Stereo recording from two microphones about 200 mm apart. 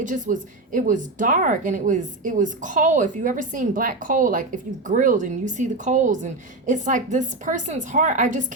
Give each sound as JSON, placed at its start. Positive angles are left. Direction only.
{"t": 0.0, "sound": "a woman's voice", "side_deg": -40}